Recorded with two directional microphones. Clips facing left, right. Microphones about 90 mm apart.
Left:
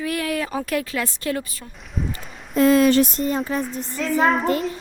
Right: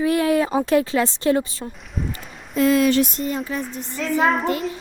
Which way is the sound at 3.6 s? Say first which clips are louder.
Left 2 dB; centre (ahead or behind).